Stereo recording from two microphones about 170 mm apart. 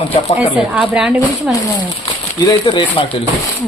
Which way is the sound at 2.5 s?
25° left (ahead or behind).